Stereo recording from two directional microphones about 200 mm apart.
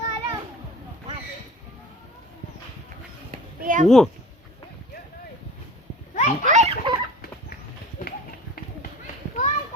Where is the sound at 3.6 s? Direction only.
40° right (ahead or behind).